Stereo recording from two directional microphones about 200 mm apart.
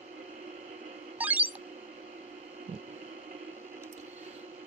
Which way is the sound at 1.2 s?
10° right (ahead or behind).